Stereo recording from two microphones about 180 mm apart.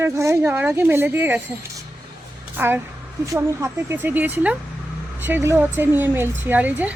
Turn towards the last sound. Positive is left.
turn(degrees=-10)  # may be behind; listen again after turning